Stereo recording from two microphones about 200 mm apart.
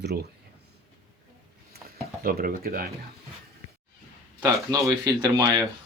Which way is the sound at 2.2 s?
45° right (ahead or behind).